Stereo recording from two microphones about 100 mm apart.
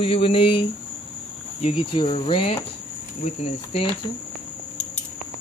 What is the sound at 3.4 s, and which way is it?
Speech, 85° left.